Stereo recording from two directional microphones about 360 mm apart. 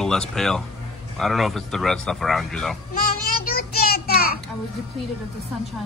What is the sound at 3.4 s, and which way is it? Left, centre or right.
Child singing, left.